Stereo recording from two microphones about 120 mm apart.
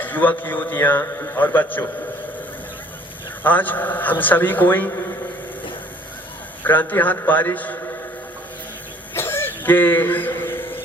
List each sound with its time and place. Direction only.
0.0 s a man's voice: 15° left (ahead or behind)
3.4 s a man's voice: 15° left (ahead or behind)
6.6 s a man's voice: 15° left (ahead or behind)
9.1 s a sound: 20° left (ahead or behind)